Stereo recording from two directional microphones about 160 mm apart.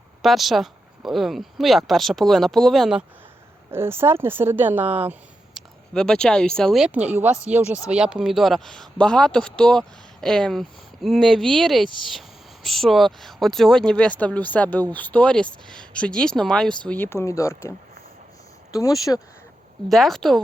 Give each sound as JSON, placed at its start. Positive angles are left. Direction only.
{"t": 0.2, "sound": "speech", "side_deg": 0}
{"t": 3.7, "sound": "speech", "side_deg": -15}
{"t": 5.5, "sound": "speech", "side_deg": 5}
{"t": 19.9, "sound": "speech", "side_deg": 0}